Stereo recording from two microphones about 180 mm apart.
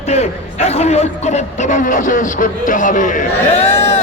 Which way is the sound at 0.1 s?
35° left (ahead or behind).